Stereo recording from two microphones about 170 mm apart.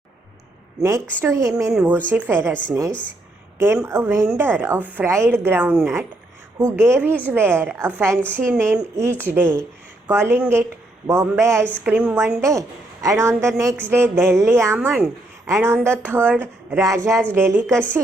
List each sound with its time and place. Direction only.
0.8 s a woman's voice: 15° right (ahead or behind)
3.8 s a woman's voice: 15° right (ahead or behind)
8.2 s a woman's voice: 10° left (ahead or behind)
8.5 s a woman's voice: 15° right (ahead or behind)